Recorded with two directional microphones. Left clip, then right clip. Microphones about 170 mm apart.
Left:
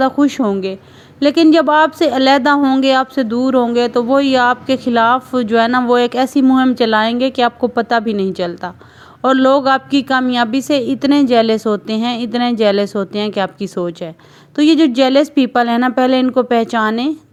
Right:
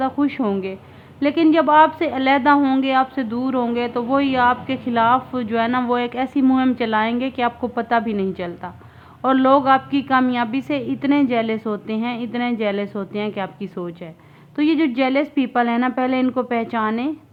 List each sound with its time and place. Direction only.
0.0 s a woman's voice: 40° left (ahead or behind)
2.6 s speech: 20° left (ahead or behind)
2.8 s a woman's voice: 40° left (ahead or behind)
14.5 s a woman's voice: 30° left (ahead or behind)